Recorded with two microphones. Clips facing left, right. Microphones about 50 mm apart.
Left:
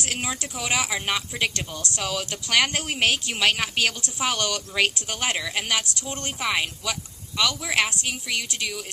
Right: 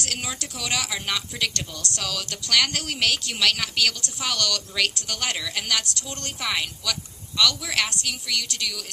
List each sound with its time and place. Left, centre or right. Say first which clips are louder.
0.0 s speech: left 2 dB; left